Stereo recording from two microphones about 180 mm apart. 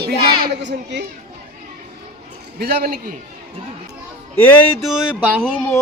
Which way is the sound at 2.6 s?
60° right (ahead or behind).